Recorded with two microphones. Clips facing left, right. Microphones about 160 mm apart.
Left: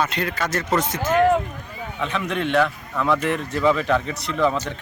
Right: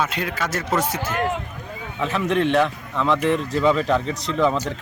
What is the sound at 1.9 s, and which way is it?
Speech, 5° right (ahead or behind).